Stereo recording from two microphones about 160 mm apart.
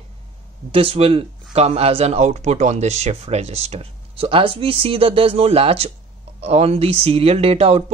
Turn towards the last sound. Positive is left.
turn(degrees=-40)  # may be behind; listen again after turning